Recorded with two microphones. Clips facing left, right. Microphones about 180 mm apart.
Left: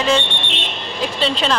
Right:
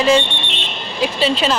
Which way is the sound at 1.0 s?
5° right (ahead or behind).